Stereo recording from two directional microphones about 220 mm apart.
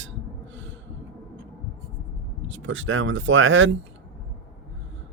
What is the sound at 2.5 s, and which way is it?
Speech, 60° right (ahead or behind).